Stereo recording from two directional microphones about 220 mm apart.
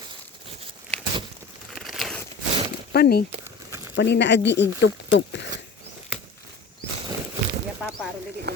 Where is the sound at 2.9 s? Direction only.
45° left (ahead or behind).